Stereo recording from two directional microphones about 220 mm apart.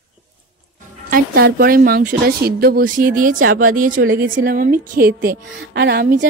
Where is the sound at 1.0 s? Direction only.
40° right (ahead or behind).